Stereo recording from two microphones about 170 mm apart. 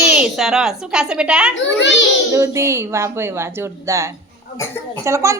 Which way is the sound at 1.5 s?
90° left.